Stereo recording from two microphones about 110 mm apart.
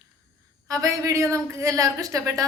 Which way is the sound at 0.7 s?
30° right (ahead or behind).